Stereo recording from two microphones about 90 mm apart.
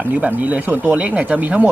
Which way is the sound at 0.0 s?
15° right (ahead or behind).